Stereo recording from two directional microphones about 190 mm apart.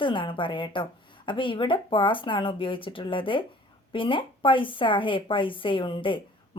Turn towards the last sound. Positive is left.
turn(degrees=25)  # may be behind; listen again after turning